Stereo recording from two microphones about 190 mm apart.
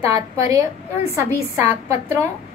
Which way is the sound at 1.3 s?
15° right (ahead or behind).